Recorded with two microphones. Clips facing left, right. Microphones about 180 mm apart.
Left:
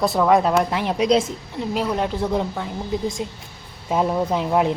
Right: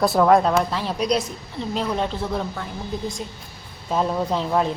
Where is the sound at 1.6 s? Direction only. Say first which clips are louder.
Left 2 dB; 5° left (ahead or behind).